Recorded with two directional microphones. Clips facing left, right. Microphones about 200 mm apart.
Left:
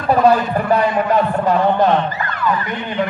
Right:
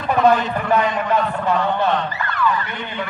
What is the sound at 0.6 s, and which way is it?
A man's voice, 40° left (ahead or behind).